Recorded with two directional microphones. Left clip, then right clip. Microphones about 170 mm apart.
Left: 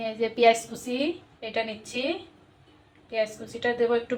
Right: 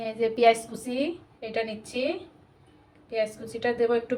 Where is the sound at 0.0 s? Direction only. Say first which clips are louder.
Even; 10° right (ahead or behind).